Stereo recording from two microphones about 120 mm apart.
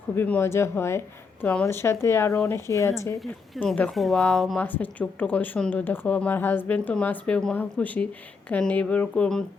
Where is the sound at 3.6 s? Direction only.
Centre (ahead or behind).